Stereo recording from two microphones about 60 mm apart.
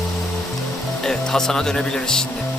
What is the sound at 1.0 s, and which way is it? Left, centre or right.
Speech, centre.